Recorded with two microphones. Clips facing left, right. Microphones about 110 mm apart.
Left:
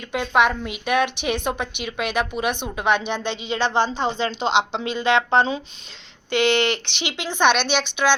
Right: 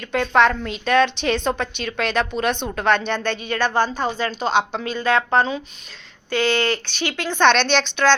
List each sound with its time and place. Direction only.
0.0 s a woman's voice: 10° left (ahead or behind)